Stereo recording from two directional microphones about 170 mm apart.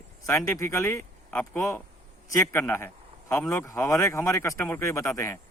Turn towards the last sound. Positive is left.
turn(degrees=15)  # may be behind; listen again after turning